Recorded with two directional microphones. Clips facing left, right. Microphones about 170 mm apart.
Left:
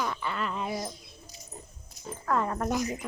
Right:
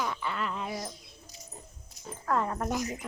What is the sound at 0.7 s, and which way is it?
Speech, 25° left (ahead or behind).